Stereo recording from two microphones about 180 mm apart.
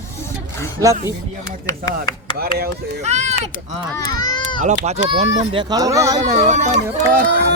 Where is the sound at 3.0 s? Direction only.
40° right (ahead or behind).